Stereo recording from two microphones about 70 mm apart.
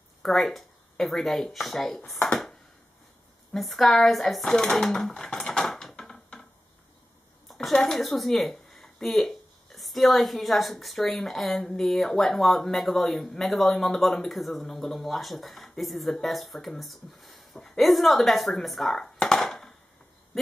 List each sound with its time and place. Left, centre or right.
0.2 s a woman's voice: centre
3.5 s speech: centre
7.4 s a woman's voice: centre